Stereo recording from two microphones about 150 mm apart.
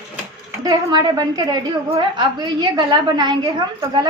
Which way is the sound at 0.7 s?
30° right (ahead or behind).